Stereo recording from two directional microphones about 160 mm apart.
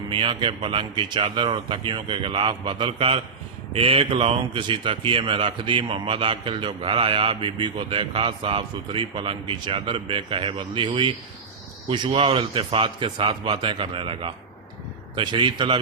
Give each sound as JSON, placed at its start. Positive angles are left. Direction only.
{"t": 0.1, "sound": "a man's voice", "side_deg": -30}